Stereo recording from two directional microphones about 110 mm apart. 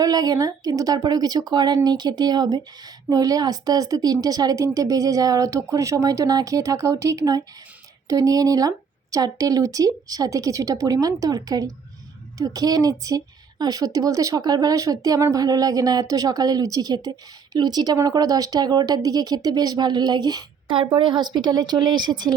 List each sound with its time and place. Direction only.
0.0 s a woman's voice: 35° right (ahead or behind)